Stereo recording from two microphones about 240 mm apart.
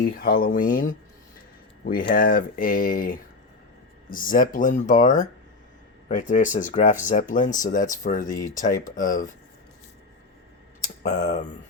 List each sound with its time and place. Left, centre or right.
0.0 s speech: left
11.0 s speech: left